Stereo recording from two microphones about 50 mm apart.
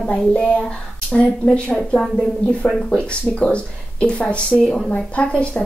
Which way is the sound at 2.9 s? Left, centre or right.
Left.